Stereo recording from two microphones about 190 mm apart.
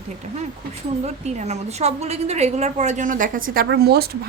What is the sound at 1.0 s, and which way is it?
A woman's voice, 35° right (ahead or behind).